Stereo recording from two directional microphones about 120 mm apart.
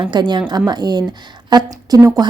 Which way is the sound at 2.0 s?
25° right (ahead or behind).